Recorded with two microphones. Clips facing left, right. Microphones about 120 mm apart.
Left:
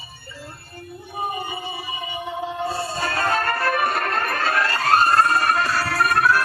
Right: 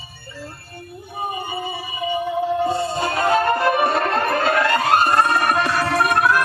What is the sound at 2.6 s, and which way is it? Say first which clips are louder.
Music: right 5 dB; 20° right (ahead or behind).